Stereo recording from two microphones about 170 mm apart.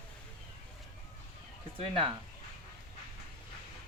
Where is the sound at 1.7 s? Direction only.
30° right (ahead or behind).